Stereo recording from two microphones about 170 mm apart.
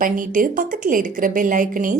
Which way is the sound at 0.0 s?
50° right (ahead or behind).